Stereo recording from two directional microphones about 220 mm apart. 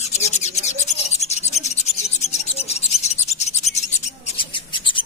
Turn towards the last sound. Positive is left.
turn(degrees=20)  # may be behind; listen again after turning